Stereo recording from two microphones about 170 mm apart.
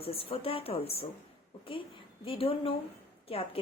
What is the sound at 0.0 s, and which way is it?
A woman's voice, 35° left (ahead or behind).